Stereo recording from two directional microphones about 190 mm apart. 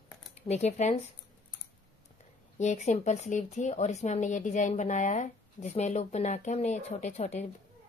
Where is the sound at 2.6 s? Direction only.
35° left (ahead or behind).